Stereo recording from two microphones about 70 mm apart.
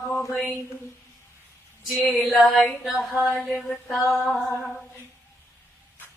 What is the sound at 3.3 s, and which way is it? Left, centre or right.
Mantra, centre.